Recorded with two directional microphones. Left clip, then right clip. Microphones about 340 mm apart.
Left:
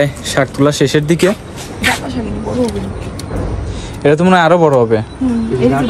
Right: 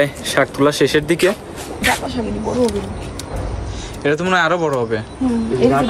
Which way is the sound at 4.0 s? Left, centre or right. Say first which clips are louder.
Left 6 dB; centre.